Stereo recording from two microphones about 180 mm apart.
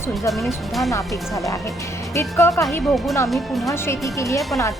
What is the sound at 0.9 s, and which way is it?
Speech, 15° left (ahead or behind).